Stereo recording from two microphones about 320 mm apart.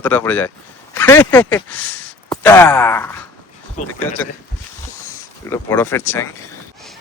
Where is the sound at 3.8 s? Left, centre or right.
Left.